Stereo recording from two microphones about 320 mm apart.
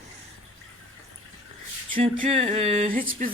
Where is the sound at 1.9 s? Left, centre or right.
Right.